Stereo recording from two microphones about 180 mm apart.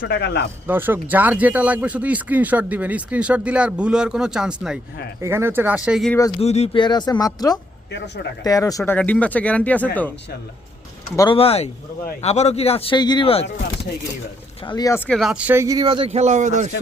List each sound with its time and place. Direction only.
0.0 s speech: 65° left (ahead or behind)
0.7 s speech: 10° right (ahead or behind)
5.2 s speech: 15° right (ahead or behind)
6.4 s a man's voice: 35° left (ahead or behind)
6.8 s speech: 25° left (ahead or behind)
7.9 s speech: 75° left (ahead or behind)
8.4 s speech: 20° left (ahead or behind)
8.8 s speech: 10° left (ahead or behind)
11.2 s a man's voice: 30° left (ahead or behind)
14.6 s speech: 25° left (ahead or behind)
15.2 s speech: 5° right (ahead or behind); by 16.7 s 40° right (ahead or behind)